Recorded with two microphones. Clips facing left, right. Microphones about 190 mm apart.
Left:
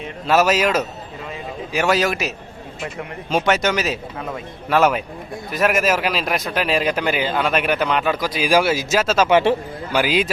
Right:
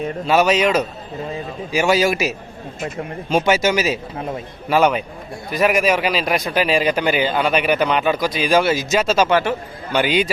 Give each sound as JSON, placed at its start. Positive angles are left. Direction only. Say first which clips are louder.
{"t": 0.3, "sound": "a man's voice", "louder": "right 1 dB", "side_deg": 5}
{"t": 9.3, "sound": "a man's voice", "louder": "left 3 dB", "side_deg": 30}
{"t": 9.9, "sound": "a man's voice", "louder": "right 1 dB", "side_deg": 5}